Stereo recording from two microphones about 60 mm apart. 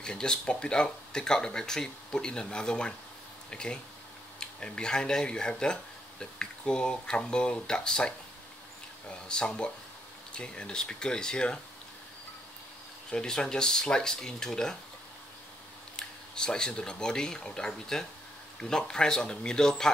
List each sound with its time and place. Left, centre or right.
0.0 s speech: centre
13.1 s speech: centre
16.0 s speech: centre